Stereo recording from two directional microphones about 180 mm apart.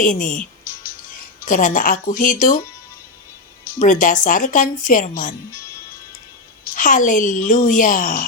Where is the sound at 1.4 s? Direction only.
45° left (ahead or behind).